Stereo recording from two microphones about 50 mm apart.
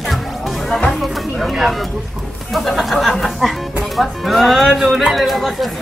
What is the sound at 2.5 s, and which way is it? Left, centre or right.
Speech, centre.